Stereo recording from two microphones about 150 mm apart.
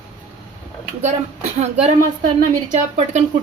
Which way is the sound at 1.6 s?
45° right (ahead or behind).